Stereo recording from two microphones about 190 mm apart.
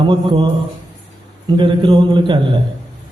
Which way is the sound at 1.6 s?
25° right (ahead or behind).